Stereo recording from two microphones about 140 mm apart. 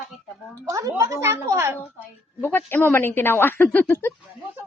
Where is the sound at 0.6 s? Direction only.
20° right (ahead or behind).